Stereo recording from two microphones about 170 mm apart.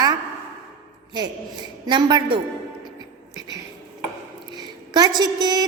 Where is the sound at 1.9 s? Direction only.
25° right (ahead or behind).